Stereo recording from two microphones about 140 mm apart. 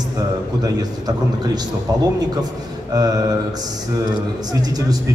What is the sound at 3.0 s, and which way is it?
Speech, 25° right (ahead or behind).